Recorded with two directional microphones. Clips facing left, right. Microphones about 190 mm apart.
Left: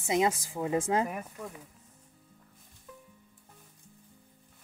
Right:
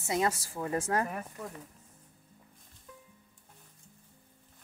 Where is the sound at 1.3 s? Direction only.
Centre (ahead or behind).